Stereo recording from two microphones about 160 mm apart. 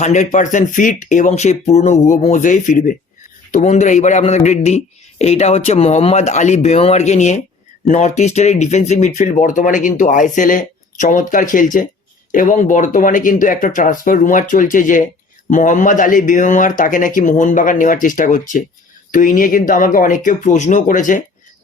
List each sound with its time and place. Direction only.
0.0 s speech: 45° left (ahead or behind)